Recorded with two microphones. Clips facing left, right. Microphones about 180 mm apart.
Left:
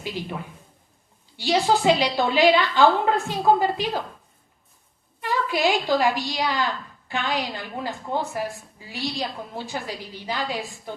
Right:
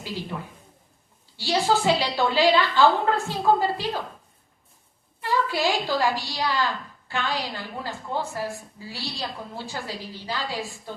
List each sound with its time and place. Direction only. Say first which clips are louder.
0.0 s a woman's voice: left 2 dB; 15° left (ahead or behind)
1.4 s a woman's voice: left 2 dB; 20° left (ahead or behind)
5.2 s a woman's voice: left 1 dB; 20° left (ahead or behind)